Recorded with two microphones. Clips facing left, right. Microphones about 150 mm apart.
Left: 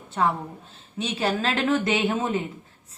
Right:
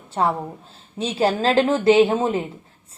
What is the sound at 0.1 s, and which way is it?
Speech, 35° right (ahead or behind).